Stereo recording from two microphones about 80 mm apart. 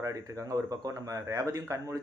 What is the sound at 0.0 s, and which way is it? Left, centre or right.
Speech, right.